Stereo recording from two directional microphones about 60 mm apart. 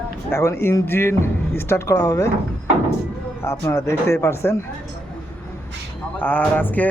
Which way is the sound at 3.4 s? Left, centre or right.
Left.